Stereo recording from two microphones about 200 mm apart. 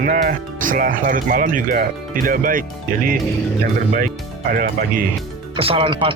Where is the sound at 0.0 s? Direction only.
45° right (ahead or behind).